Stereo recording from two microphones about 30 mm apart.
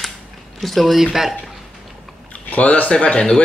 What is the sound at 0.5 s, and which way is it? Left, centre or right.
Speech, centre.